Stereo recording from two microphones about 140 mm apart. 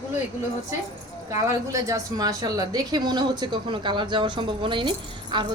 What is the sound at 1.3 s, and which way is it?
A woman's voice, 20° right (ahead or behind).